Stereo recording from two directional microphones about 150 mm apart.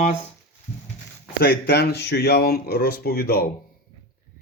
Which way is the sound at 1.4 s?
90° left.